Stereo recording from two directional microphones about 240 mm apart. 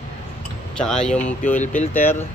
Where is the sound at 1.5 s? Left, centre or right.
Left.